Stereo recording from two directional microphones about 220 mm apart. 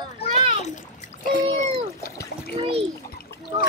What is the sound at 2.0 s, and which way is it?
Splash, 45° left (ahead or behind).